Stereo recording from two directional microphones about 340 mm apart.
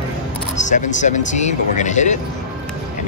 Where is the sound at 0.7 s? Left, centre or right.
Left.